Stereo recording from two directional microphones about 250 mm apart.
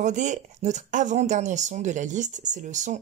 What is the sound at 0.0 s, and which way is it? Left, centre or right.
Speech, right.